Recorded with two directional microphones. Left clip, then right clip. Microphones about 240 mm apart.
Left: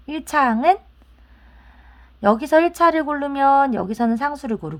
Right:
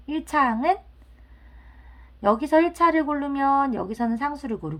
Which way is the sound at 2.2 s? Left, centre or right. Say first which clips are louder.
Left 4 dB; left.